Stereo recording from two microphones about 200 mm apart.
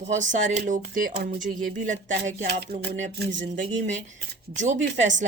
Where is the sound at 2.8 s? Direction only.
35° right (ahead or behind).